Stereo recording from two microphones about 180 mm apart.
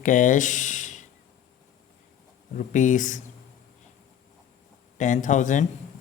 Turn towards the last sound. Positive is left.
turn(degrees=45)  # may be behind; listen again after turning